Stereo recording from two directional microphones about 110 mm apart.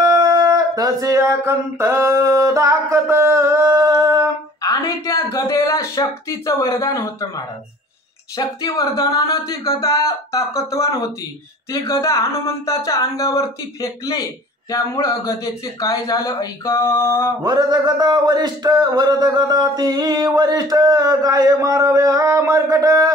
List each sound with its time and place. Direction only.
0.0 s speech: 35° right (ahead or behind)
4.6 s speech: 30° left (ahead or behind)
17.4 s a sound: 40° right (ahead or behind)